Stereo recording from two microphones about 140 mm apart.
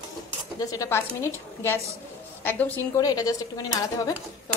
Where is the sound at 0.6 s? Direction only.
25° left (ahead or behind).